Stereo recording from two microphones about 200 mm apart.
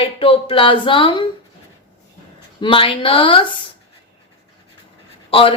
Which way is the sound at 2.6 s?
25° left (ahead or behind).